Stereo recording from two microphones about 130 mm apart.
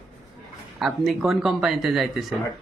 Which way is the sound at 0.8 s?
Centre (ahead or behind).